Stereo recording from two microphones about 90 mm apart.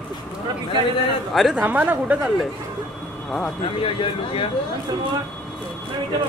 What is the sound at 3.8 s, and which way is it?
Speech, 90° left.